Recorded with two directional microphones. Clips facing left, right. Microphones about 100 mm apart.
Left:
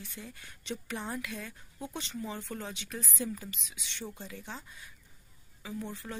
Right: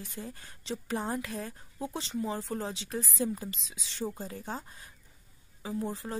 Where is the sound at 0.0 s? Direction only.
35° right (ahead or behind).